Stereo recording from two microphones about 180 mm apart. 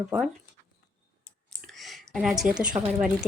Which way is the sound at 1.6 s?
Centre (ahead or behind).